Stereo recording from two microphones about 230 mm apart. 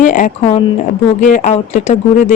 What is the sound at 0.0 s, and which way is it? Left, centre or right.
A woman's voice, left.